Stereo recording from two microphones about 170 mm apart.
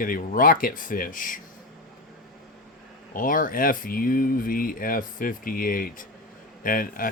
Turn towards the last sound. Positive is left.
turn(degrees=55)  # may be behind; listen again after turning